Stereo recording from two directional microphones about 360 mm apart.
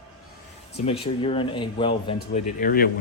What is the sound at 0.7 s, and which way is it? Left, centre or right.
Speech, centre.